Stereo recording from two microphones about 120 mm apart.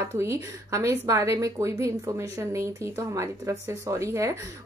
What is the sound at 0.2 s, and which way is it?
A woman's voice, 25° right (ahead or behind).